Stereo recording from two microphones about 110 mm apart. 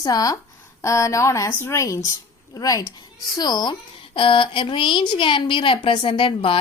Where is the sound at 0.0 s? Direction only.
35° left (ahead or behind).